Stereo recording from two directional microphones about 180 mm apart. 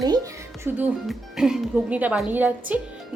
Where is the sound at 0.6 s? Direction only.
10° right (ahead or behind).